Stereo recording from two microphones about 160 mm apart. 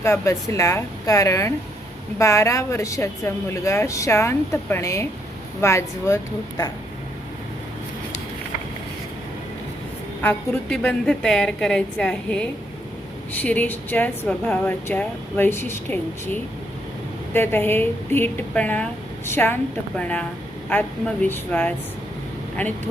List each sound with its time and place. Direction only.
0.0 s a woman's voice: 20° left (ahead or behind)
10.2 s a woman's voice: 10° left (ahead or behind)